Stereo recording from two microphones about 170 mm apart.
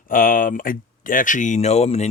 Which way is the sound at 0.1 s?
55° left (ahead or behind).